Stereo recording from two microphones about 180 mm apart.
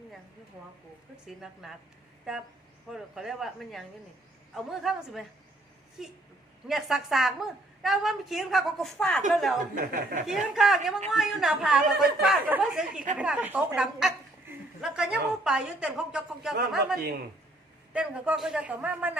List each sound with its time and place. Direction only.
2.3 s a woman's voice: 5° right (ahead or behind)
9.7 s speech: 50° right (ahead or behind)
10.2 s a woman's voice: centre (ahead or behind)
17.9 s a man's voice: 5° right (ahead or behind)